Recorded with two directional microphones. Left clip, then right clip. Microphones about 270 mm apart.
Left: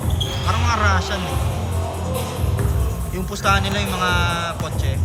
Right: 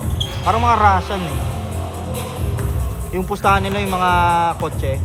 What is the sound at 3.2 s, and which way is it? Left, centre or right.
Speech, right.